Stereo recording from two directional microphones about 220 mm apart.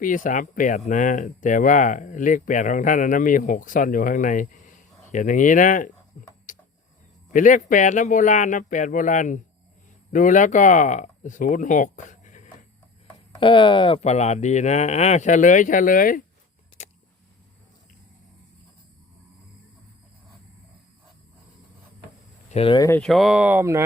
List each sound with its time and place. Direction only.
0.0 s speech: 35° left (ahead or behind)
6.2 s a sound: 40° left (ahead or behind)
7.3 s speech: 35° left (ahead or behind)
13.1 s speech: 20° left (ahead or behind); by 16.2 s 40° left (ahead or behind)
16.8 s a sound: 30° left (ahead or behind)
22.4 s speech: 25° left (ahead or behind)
22.9 s speech: centre (ahead or behind)